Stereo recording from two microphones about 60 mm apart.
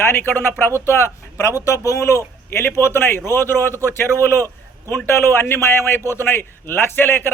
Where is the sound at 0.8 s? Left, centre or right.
Left.